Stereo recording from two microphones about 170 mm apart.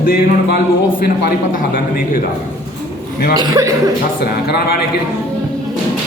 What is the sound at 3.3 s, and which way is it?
Speech, 20° right (ahead or behind).